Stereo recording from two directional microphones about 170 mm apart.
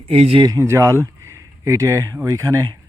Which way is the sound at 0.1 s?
35° right (ahead or behind).